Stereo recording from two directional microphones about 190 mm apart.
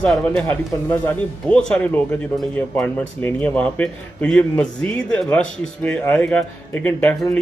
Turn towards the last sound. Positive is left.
turn(degrees=10)  # may be behind; listen again after turning